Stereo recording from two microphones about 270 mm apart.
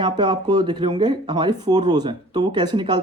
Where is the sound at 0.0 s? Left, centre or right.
Centre.